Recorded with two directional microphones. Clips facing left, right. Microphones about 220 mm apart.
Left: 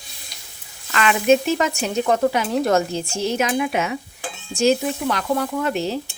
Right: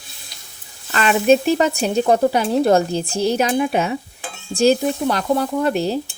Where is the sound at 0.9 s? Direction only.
35° right (ahead or behind).